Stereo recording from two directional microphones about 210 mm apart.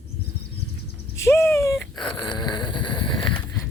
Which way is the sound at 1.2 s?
10° left (ahead or behind).